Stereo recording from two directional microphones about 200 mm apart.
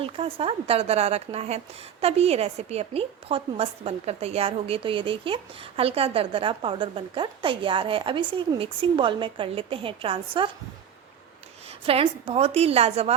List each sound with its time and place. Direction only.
0.0 s speech: 25° right (ahead or behind)
11.9 s a woman's voice: 30° right (ahead or behind)